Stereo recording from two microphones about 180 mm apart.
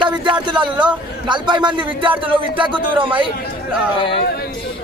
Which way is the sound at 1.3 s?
25° right (ahead or behind).